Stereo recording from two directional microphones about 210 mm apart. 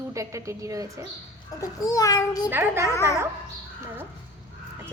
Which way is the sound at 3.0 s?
15° left (ahead or behind).